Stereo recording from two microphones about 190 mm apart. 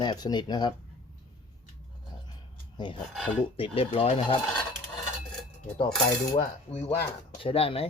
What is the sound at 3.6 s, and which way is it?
Speech, 30° left (ahead or behind).